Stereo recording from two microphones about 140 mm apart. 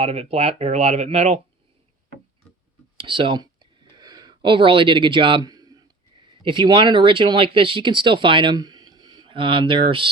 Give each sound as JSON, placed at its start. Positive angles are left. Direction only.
{"t": 0.0, "sound": "speech", "side_deg": -45}
{"t": 3.0, "sound": "a sound", "side_deg": -35}
{"t": 6.4, "sound": "speech", "side_deg": -35}